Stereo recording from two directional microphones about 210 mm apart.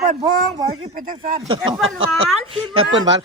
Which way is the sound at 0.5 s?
30° right (ahead or behind).